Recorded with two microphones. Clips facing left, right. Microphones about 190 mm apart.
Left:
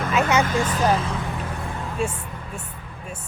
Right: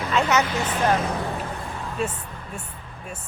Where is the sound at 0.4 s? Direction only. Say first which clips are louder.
Left 4 dB; 45° left (ahead or behind).